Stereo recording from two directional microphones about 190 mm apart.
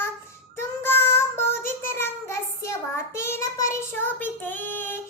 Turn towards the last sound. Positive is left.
turn(degrees=10)  # may be behind; listen again after turning